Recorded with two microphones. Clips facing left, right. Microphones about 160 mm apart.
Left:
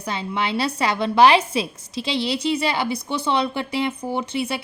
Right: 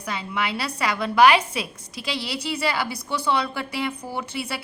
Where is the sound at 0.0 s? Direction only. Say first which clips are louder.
Left 3 dB; 25° left (ahead or behind).